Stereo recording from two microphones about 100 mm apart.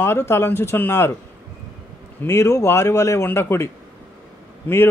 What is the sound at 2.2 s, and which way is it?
Speech, 30° left (ahead or behind).